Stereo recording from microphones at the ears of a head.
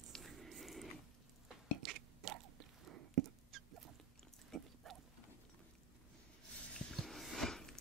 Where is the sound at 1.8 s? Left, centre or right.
Right.